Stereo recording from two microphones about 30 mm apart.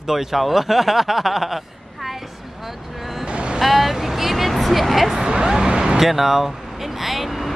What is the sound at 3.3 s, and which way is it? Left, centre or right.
Vehicle, right.